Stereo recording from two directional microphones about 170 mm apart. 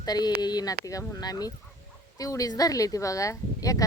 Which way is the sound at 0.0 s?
25° left (ahead or behind).